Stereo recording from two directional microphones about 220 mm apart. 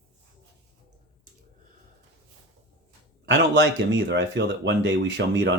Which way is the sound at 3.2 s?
50° right (ahead or behind).